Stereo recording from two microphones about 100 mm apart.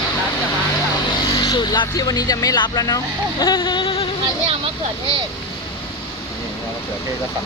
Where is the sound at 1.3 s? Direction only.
45° left (ahead or behind).